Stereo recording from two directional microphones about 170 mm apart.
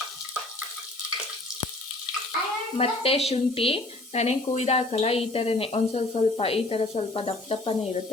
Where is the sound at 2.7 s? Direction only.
35° left (ahead or behind).